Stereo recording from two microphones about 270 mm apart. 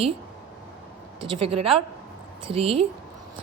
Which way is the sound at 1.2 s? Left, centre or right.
Centre.